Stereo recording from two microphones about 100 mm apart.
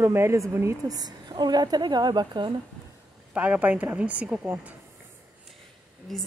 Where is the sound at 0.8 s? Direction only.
40° right (ahead or behind).